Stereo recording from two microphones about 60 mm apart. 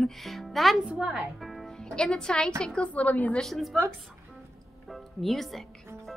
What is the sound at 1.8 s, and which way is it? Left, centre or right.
Speech, centre.